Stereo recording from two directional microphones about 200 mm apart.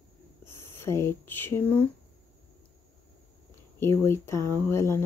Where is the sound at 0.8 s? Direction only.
15° left (ahead or behind).